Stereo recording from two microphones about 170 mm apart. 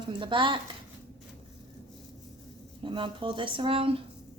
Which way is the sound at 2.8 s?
30° right (ahead or behind).